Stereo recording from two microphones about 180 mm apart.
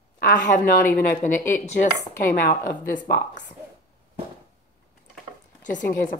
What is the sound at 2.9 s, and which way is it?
Speech, 50° left (ahead or behind).